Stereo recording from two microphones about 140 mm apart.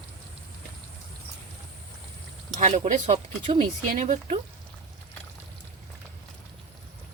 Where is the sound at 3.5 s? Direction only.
35° right (ahead or behind).